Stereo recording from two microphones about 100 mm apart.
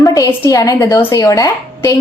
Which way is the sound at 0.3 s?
30° left (ahead or behind).